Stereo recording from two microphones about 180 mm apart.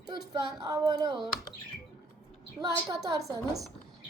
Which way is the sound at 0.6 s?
20° right (ahead or behind).